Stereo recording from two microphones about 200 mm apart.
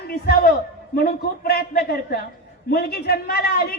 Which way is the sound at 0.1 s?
55° left (ahead or behind).